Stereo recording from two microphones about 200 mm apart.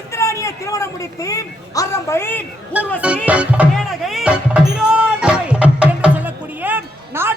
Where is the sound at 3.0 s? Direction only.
5° right (ahead or behind).